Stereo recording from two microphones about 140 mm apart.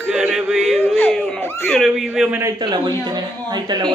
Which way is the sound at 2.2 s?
10° right (ahead or behind).